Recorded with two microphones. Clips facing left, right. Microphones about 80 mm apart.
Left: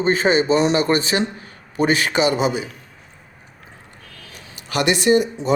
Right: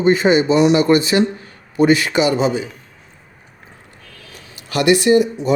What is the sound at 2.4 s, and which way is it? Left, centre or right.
Speech, centre.